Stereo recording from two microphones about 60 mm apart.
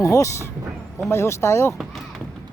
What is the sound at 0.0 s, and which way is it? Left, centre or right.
Speech, left.